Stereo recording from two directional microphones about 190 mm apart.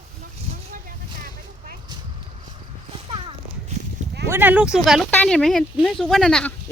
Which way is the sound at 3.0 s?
30° right (ahead or behind).